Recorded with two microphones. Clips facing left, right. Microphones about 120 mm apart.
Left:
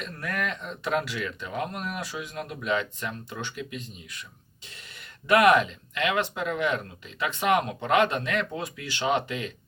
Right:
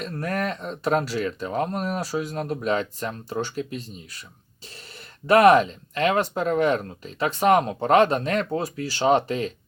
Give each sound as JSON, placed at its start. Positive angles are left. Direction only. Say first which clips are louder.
{"t": 0.0, "sound": "speech", "louder": "right 5 dB", "side_deg": -35}
{"t": 5.3, "sound": "speech", "louder": "right 4 dB", "side_deg": -35}